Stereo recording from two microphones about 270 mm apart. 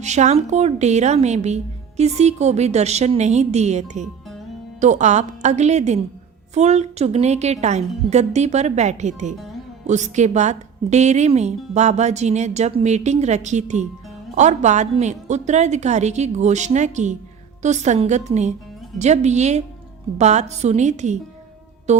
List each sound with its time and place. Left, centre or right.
0.0 s a woman's voice: right
21.9 s music: right